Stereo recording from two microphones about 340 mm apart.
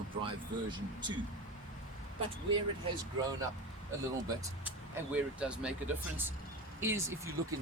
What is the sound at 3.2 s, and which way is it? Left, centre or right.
Speech, centre.